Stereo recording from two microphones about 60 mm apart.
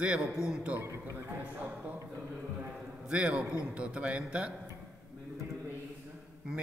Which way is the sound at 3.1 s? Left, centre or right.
Centre.